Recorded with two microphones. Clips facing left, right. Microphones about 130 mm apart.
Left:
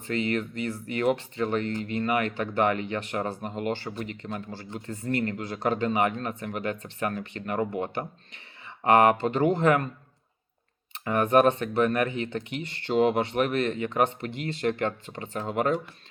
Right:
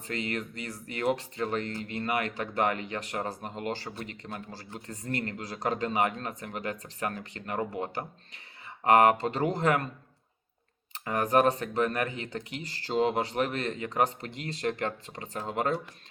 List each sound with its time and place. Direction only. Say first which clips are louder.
0.3 s speech: left 6 dB; 40° right (ahead or behind)
8.6 s speech: left 1 dB; 35° right (ahead or behind)
10.9 s speech: left 4 dB; 35° right (ahead or behind)